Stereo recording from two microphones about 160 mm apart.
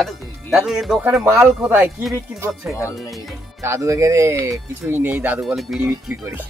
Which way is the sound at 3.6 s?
20° right (ahead or behind).